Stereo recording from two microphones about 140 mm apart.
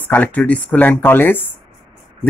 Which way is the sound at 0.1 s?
10° left (ahead or behind).